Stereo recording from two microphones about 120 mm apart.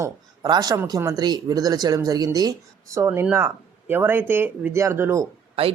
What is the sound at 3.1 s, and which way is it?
Speech, 15° right (ahead or behind).